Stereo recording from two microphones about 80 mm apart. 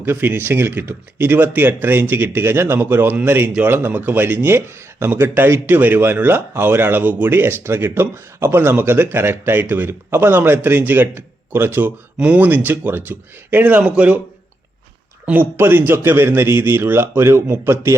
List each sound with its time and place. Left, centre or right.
0.0 s a man's voice: right
15.3 s speech: right